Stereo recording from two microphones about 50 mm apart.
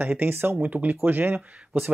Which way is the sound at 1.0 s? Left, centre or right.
Right.